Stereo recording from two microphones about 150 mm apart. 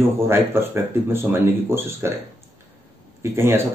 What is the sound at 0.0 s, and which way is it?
Speech, 15° right (ahead or behind).